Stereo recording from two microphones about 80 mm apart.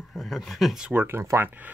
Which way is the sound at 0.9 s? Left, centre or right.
Right.